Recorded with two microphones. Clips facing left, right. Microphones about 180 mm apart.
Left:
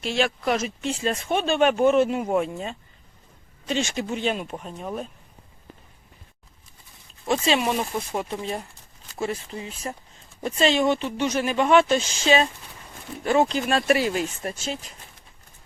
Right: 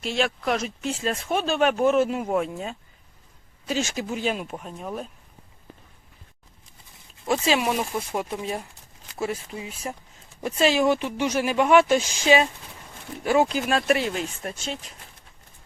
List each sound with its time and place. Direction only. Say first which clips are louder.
0.0 s speech: left 1 dB; centre (ahead or behind)
7.3 s speech: even; 5° right (ahead or behind)